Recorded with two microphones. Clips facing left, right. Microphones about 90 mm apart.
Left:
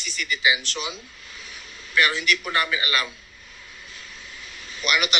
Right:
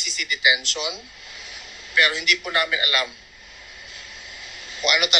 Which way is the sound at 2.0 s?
35° left (ahead or behind).